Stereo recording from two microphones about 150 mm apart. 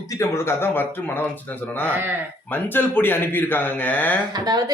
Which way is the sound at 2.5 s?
15° left (ahead or behind).